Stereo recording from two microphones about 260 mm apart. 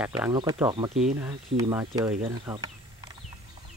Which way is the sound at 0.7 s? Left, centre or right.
Right.